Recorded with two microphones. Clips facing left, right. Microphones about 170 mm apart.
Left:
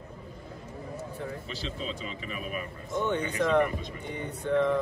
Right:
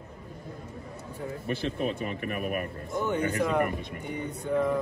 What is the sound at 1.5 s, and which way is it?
Speech, 60° right (ahead or behind).